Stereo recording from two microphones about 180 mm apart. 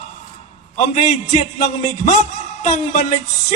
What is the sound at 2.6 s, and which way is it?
Speech, 40° left (ahead or behind).